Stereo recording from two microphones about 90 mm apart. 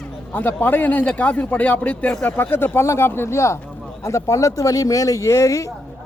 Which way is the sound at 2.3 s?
25° left (ahead or behind).